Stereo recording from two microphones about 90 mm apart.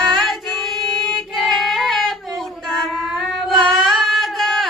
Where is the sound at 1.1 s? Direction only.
Centre (ahead or behind).